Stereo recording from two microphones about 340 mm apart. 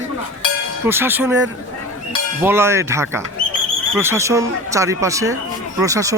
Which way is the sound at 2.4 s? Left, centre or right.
Centre.